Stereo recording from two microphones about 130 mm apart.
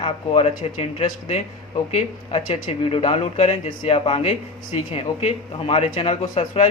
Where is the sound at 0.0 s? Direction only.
50° left (ahead or behind).